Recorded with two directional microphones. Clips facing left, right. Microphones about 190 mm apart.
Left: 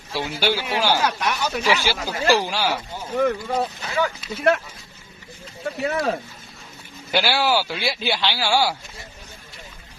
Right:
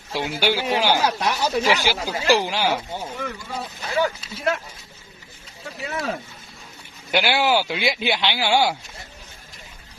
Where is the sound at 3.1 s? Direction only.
55° left (ahead or behind).